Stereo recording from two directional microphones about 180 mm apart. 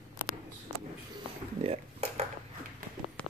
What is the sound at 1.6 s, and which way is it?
Dishes, 35° right (ahead or behind).